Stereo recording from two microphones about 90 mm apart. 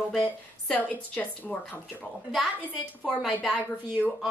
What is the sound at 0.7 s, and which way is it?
A woman's voice, 15° left (ahead or behind).